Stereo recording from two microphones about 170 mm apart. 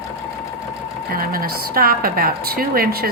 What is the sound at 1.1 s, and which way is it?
A woman's voice, 60° right (ahead or behind).